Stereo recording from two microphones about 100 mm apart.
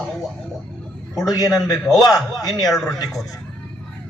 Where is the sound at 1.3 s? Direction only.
35° left (ahead or behind).